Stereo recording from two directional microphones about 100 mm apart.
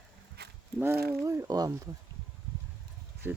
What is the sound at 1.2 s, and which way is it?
Speech, 30° right (ahead or behind).